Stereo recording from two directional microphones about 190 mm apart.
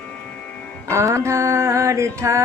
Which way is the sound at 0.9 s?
15° right (ahead or behind).